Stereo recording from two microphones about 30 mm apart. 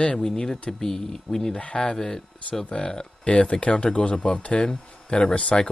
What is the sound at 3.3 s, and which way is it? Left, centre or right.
Speech, left.